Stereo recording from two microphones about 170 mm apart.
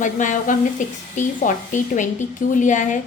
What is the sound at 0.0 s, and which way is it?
A woman's voice, 50° left (ahead or behind).